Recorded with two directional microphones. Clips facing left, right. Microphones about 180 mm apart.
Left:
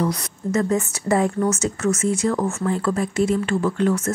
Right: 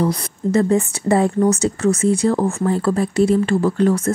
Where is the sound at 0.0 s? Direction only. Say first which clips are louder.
Right 4 dB; 30° right (ahead or behind).